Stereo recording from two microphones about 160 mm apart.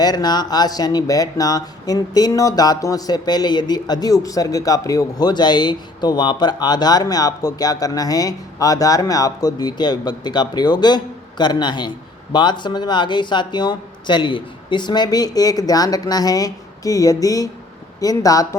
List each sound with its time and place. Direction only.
0.0 s speech: 25° left (ahead or behind)